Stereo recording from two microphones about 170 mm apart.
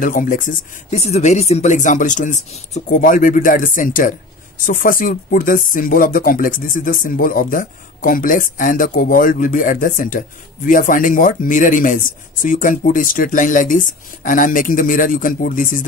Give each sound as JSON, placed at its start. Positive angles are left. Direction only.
{"t": 0.0, "sound": "speech", "side_deg": 50}